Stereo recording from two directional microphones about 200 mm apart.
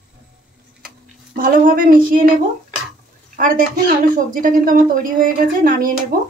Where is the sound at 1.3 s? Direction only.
45° right (ahead or behind).